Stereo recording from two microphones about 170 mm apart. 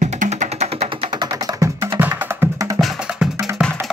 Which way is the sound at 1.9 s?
10° right (ahead or behind).